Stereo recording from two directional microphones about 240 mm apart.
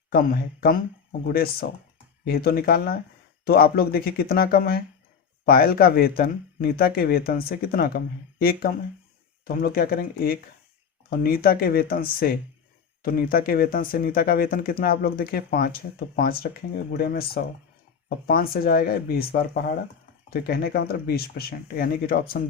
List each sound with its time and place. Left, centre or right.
0.1 s speech: left